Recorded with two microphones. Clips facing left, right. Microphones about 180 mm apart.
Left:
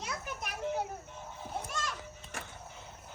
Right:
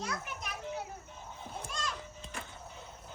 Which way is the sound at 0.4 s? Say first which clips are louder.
Left 7 dB; 60° left (ahead or behind).